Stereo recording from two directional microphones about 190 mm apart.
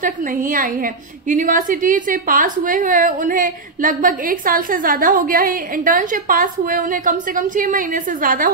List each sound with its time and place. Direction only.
0.0 s a woman's voice: 45° right (ahead or behind)